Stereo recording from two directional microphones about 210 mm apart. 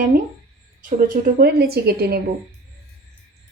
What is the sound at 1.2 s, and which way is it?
Speech, 45° right (ahead or behind).